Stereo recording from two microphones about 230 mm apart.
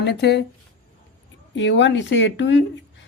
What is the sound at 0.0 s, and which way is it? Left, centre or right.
Speech, left.